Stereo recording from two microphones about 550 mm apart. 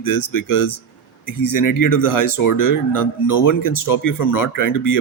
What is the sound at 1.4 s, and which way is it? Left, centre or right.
Speech, left.